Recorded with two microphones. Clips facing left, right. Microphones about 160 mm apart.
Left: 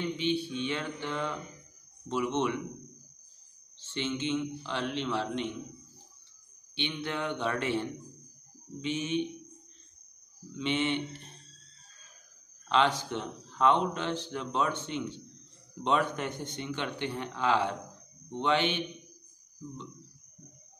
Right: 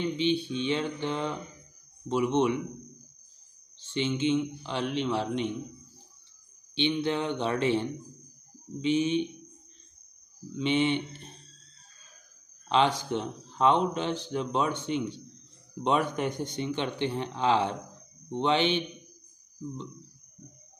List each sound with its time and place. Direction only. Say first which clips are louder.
0.2 s speech: right 3 dB; 20° right (ahead or behind)
3.9 s speech: right 5 dB; 15° right (ahead or behind)
6.7 s speech: right 7 dB; 20° right (ahead or behind)
10.6 s speech: right 4 dB; 20° right (ahead or behind)
12.6 s speech: right 2 dB; 20° right (ahead or behind)